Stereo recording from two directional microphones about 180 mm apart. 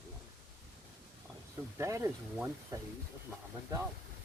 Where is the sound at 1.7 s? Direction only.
15° right (ahead or behind).